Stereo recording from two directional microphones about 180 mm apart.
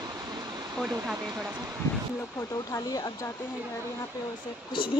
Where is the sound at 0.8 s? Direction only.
5° right (ahead or behind).